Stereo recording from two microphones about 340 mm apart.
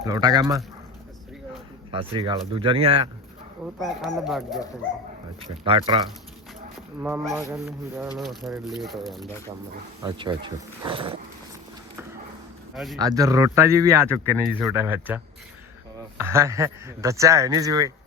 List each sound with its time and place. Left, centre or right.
0.0 s a man's voice: centre
1.9 s a man's voice: centre
3.8 s speech: centre
5.6 s a man's voice: centre
7.0 s a man's voice: centre
10.0 s a man's voice: centre
12.7 s a man's voice: centre
13.0 s a man's voice: centre